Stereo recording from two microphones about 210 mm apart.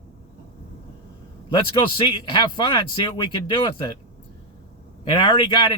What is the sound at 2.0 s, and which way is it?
Speech, 20° left (ahead or behind).